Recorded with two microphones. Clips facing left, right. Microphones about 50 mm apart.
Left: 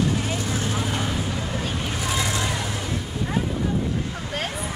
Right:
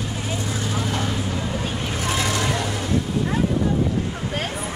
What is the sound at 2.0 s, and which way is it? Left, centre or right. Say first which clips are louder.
Vehicle: right 3 dB; right.